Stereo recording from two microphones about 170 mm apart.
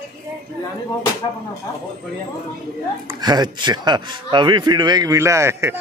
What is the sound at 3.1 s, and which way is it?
A man's voice, 25° right (ahead or behind).